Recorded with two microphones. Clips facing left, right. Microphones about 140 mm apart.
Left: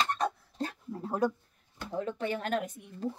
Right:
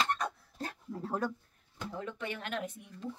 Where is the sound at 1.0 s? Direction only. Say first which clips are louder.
Left 5 dB; 10° left (ahead or behind).